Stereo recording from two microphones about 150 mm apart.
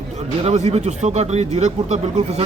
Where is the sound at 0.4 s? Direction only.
45° right (ahead or behind).